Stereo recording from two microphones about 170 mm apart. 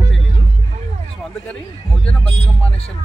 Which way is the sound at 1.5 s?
5° left (ahead or behind).